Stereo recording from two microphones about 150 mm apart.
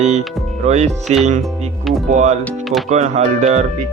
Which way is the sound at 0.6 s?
50° right (ahead or behind).